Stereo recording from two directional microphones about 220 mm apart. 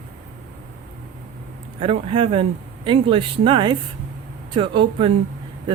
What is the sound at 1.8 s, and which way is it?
Speech, 25° right (ahead or behind).